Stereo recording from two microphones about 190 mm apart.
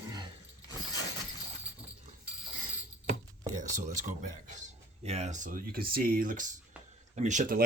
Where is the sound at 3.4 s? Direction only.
40° right (ahead or behind).